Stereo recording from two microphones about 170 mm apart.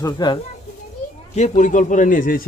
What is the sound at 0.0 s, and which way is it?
Speech, 25° left (ahead or behind).